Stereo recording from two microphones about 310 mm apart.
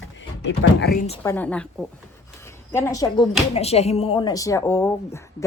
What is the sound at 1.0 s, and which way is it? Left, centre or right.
Speech, centre.